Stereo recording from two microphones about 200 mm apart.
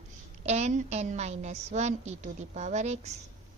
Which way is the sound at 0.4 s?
35° right (ahead or behind).